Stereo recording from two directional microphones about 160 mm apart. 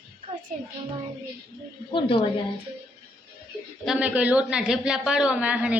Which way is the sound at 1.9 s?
35° left (ahead or behind).